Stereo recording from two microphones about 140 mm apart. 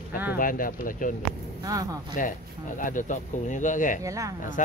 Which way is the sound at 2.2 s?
70° left (ahead or behind).